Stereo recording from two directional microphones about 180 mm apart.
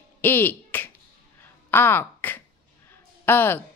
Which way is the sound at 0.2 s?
10° left (ahead or behind).